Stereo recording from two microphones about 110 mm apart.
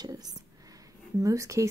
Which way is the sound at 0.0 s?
35° right (ahead or behind).